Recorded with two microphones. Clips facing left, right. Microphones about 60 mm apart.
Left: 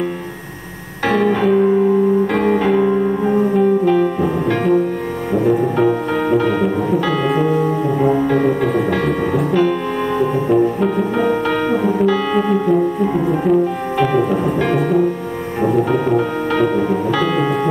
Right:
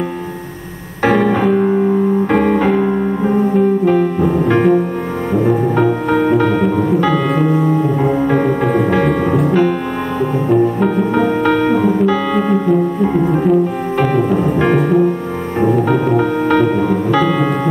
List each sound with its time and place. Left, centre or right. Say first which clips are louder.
1.0 s music: right 2 dB; centre
3.3 s music: right 3 dB; centre
3.8 s music: right 2 dB; right
6.2 s music: even; centre
10.5 s music: right 3 dB; centre
11.8 s music: right 2 dB; centre
17.2 s music: right 2 dB; right